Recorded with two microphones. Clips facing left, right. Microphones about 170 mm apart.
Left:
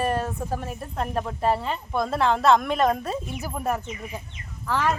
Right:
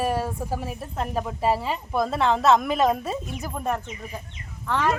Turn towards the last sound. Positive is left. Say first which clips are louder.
# even
turn(degrees=5)  # may be behind; listen again after turning